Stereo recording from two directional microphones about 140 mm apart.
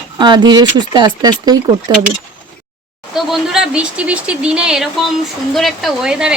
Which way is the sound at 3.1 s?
5° right (ahead or behind).